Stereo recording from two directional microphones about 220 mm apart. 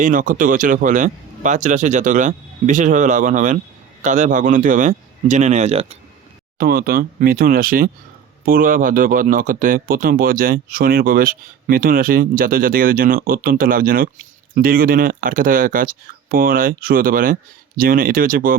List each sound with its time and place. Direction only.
0.0 s speech: 35° right (ahead or behind)
6.6 s speech: 40° right (ahead or behind)